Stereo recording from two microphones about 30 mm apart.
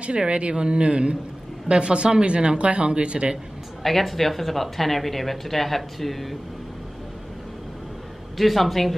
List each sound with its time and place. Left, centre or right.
0.2 s a man's voice: right
2.6 s a man's voice: right
3.8 s speech: centre
8.4 s speech: centre